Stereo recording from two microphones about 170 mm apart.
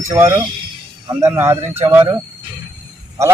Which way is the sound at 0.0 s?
20° right (ahead or behind).